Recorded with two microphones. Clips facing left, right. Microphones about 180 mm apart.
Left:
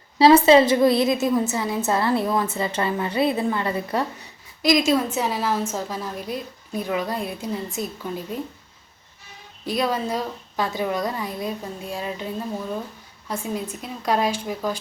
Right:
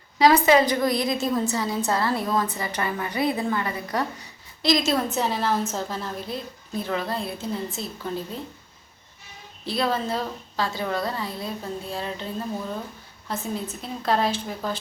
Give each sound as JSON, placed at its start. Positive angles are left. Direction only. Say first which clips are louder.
{"t": 0.2, "sound": "a woman's voice", "louder": "left 4 dB", "side_deg": 30}
{"t": 4.6, "sound": "a woman's voice", "louder": "left 3 dB", "side_deg": 10}
{"t": 9.6, "sound": "a woman's voice", "louder": "left 1 dB", "side_deg": 15}